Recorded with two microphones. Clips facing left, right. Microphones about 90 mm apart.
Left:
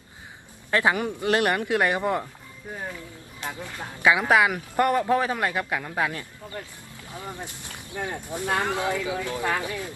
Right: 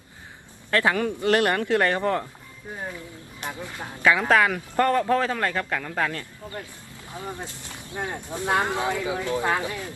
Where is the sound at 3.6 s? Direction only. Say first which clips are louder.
Right 1 dB; 20° right (ahead or behind).